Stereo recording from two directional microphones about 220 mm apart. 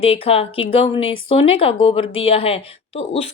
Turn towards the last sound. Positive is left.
turn(degrees=25)  # may be behind; listen again after turning